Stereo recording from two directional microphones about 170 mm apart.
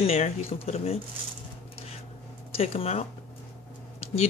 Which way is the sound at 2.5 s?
35° left (ahead or behind).